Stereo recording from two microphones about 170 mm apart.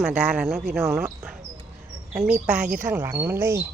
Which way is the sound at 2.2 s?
5° right (ahead or behind).